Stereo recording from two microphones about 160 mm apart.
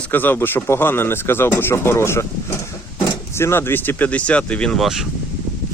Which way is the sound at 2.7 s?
20° left (ahead or behind).